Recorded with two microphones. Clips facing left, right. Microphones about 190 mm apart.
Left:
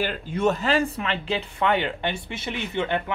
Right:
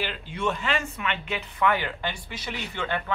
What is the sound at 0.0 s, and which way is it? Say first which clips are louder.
Speech: left 6 dB; 45° left (ahead or behind).